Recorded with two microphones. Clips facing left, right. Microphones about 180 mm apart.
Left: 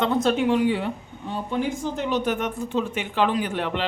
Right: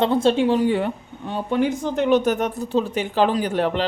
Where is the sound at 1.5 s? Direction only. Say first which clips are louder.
Right 5 dB; 65° right (ahead or behind).